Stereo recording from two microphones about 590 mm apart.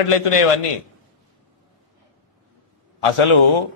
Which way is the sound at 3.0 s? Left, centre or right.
Left.